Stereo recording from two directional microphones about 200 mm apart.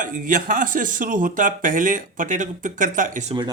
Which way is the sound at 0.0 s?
40° right (ahead or behind).